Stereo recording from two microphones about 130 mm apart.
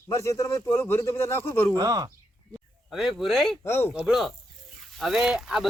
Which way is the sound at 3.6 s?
20° left (ahead or behind).